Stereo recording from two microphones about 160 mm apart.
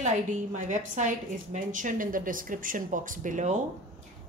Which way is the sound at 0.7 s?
50° right (ahead or behind).